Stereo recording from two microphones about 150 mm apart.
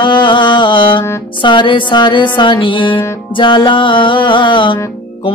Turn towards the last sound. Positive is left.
turn(degrees=35)  # may be behind; listen again after turning